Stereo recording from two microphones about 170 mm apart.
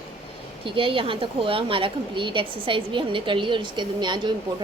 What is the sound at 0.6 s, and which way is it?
A woman's voice, 30° right (ahead or behind).